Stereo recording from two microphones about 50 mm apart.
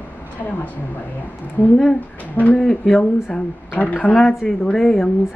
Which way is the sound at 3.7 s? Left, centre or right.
Left.